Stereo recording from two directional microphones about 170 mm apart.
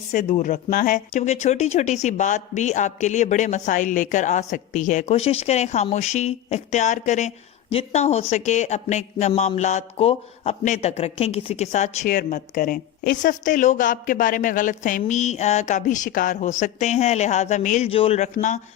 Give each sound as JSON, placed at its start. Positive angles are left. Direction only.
{"t": 0.1, "sound": "speech", "side_deg": 45}
{"t": 12.0, "sound": "speech", "side_deg": 55}